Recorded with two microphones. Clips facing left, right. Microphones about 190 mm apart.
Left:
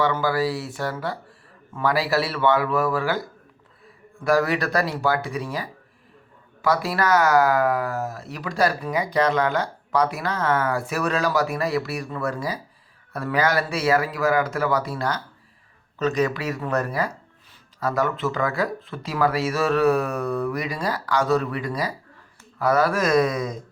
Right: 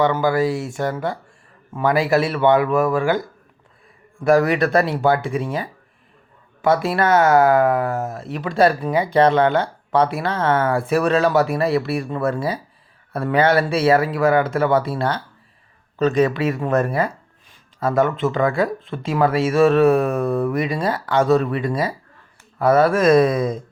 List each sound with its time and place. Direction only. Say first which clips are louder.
0.0 s speech: right 4 dB; 20° right (ahead or behind)